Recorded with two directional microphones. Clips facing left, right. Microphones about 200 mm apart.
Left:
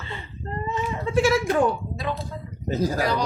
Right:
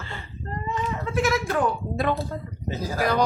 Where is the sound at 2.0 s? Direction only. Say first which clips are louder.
Right 5 dB; 55° right (ahead or behind).